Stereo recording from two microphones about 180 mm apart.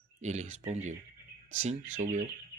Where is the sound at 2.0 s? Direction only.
45° right (ahead or behind).